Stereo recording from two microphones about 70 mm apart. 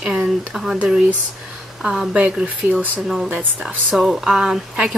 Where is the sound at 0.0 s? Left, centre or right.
Centre.